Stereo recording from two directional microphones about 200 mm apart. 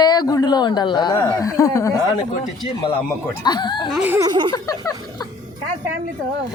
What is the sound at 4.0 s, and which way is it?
Speech, 10° right (ahead or behind).